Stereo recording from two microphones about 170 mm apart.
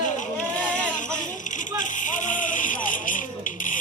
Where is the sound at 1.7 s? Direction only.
50° left (ahead or behind).